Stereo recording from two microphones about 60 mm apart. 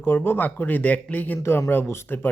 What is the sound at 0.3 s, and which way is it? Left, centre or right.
Speech, left.